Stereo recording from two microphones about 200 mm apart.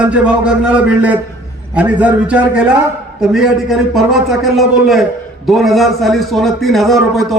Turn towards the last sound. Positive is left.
turn(degrees=0)  # may be behind; listen again after turning